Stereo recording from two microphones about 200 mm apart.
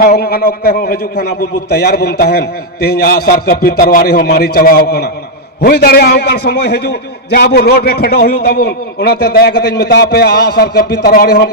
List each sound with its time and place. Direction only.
0.0 s a man's voice: 50° left (ahead or behind)